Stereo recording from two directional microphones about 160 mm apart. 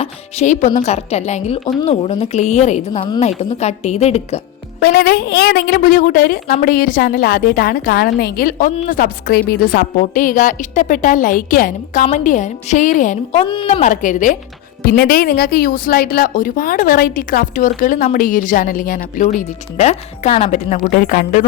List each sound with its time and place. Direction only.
0.0 s a woman's voice: 45° left (ahead or behind)
4.8 s a woman's voice: 80° left
10.0 s a woman's voice: 55° left (ahead or behind)
13.4 s speech: 30° left (ahead or behind)
13.8 s a woman's voice: 50° left (ahead or behind)
14.8 s a woman's voice: 70° left (ahead or behind); by 21.4 s 55° left (ahead or behind)